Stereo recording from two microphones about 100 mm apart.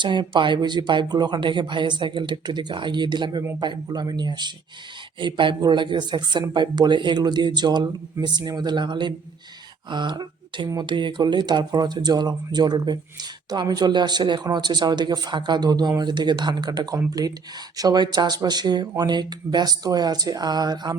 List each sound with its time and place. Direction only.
0.0 s speech: 50° right (ahead or behind)